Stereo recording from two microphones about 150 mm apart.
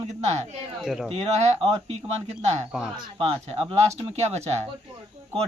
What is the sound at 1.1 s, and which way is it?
Speech, 45° right (ahead or behind).